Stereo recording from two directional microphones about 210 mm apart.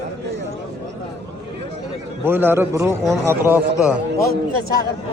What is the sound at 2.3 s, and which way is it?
A man's voice, 10° right (ahead or behind).